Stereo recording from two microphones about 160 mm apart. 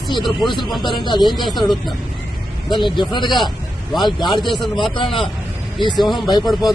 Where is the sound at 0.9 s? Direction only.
30° left (ahead or behind).